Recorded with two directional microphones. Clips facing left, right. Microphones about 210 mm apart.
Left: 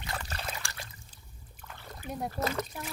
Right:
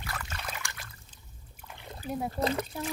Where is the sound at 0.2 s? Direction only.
35° left (ahead or behind).